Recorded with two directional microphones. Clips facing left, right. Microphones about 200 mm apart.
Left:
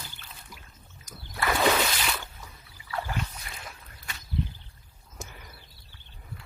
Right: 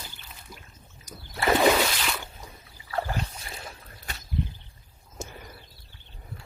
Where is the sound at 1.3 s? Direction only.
20° right (ahead or behind).